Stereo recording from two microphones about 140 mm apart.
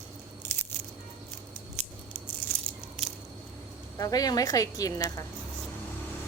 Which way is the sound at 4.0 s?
25° left (ahead or behind).